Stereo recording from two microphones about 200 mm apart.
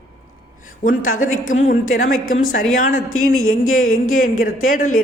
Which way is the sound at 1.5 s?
40° left (ahead or behind).